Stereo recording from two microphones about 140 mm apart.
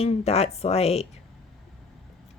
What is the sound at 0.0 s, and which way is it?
Speech, 45° left (ahead or behind).